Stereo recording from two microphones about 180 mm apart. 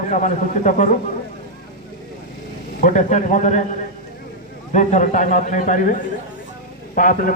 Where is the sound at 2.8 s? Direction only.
45° left (ahead or behind).